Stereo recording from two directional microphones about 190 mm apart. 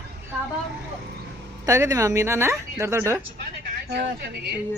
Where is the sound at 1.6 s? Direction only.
15° right (ahead or behind).